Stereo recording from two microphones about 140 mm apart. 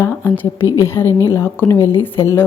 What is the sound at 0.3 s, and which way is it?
A woman's voice, 15° left (ahead or behind).